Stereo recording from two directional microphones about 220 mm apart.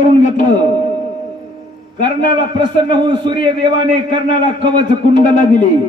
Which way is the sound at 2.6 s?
20° right (ahead or behind).